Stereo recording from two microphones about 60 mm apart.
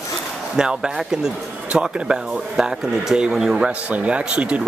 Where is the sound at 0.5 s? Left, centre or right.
Centre.